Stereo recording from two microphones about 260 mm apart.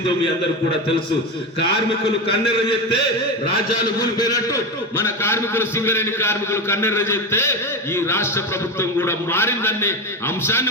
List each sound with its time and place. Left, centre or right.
3.9 s a man's voice: centre